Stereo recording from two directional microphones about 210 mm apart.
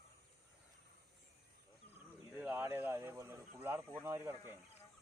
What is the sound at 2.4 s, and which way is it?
Speech, 10° right (ahead or behind).